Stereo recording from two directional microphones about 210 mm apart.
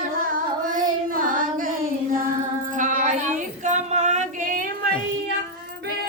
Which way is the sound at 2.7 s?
35° right (ahead or behind).